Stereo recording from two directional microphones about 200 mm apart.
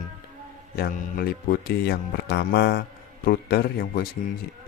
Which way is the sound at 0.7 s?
50° left (ahead or behind).